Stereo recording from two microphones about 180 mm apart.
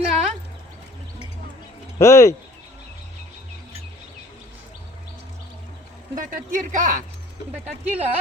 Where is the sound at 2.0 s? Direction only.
15° left (ahead or behind).